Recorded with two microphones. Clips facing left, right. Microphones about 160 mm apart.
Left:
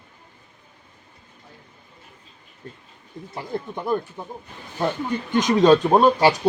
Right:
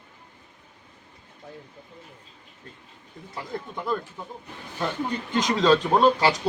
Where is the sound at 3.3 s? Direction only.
25° left (ahead or behind).